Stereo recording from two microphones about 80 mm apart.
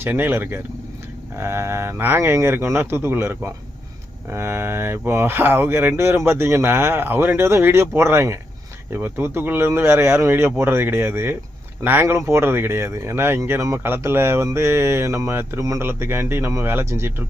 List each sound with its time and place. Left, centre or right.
0.0 s speech: right